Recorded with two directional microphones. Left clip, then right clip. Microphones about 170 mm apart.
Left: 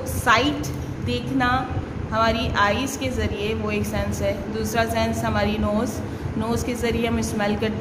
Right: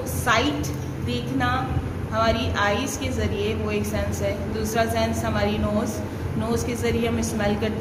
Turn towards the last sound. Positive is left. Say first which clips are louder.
# left 1 dB
turn(degrees=65)  # may be behind; listen again after turning